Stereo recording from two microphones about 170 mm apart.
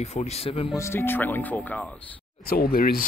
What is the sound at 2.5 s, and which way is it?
Speech, 60° left (ahead or behind).